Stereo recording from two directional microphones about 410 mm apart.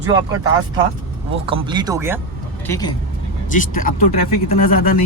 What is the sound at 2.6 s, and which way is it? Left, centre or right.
Speech, centre.